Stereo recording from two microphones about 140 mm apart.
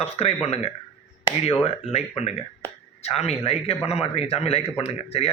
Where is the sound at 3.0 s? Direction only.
50° left (ahead or behind).